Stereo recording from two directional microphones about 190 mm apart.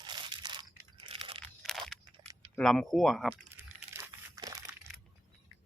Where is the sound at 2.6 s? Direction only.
Centre (ahead or behind).